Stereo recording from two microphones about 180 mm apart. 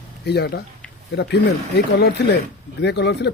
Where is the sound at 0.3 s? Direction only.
65° left (ahead or behind).